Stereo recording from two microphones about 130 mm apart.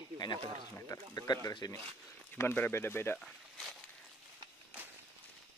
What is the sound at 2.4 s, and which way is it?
Speech, 15° left (ahead or behind).